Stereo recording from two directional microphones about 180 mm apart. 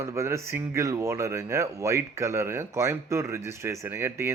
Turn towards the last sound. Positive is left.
turn(degrees=-15)  # may be behind; listen again after turning